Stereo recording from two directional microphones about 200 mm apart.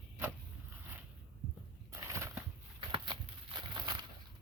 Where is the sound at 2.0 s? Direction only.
15° right (ahead or behind).